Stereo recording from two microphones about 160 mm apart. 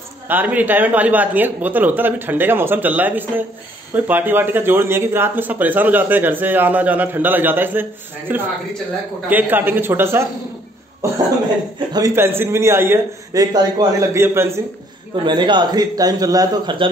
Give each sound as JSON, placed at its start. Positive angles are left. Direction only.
{"t": 0.3, "sound": "speech", "side_deg": -10}
{"t": 11.9, "sound": "speech", "side_deg": -15}
{"t": 15.2, "sound": "a man's voice", "side_deg": -30}